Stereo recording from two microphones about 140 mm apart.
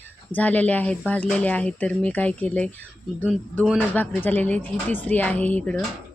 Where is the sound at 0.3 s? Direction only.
10° left (ahead or behind).